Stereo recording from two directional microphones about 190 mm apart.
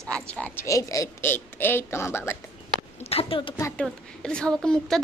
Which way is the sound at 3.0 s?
30° left (ahead or behind).